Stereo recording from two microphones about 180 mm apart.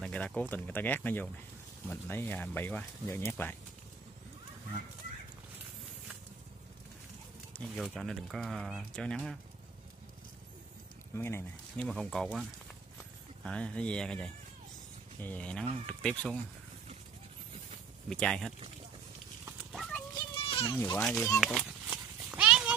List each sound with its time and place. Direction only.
0.0 s speech: 5° left (ahead or behind)
7.5 s speech: centre (ahead or behind)
11.1 s speech: 10° left (ahead or behind)
18.1 s speech: 5° left (ahead or behind)
19.7 s clip-clop: centre (ahead or behind)
20.4 s a sound: 30° left (ahead or behind)
20.7 s a child's voice: 20° left (ahead or behind)
21.0 s speech: 5° left (ahead or behind)
21.8 s horse: 5° right (ahead or behind)